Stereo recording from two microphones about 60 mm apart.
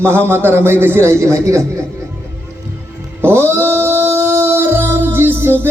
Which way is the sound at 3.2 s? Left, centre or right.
Right.